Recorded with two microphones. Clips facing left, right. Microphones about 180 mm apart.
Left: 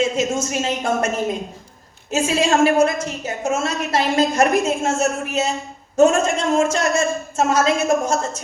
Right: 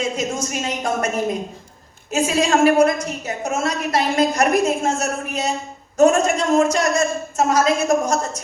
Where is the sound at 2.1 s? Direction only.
25° left (ahead or behind).